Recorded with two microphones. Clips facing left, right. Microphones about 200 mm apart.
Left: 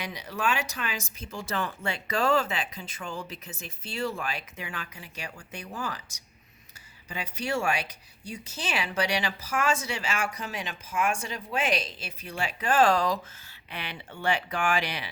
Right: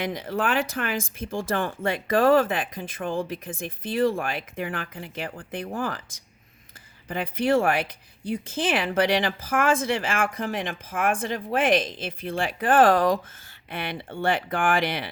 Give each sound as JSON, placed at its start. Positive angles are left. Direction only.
{"t": 0.0, "sound": "speech", "side_deg": -50}
{"t": 7.1, "sound": "speech", "side_deg": -55}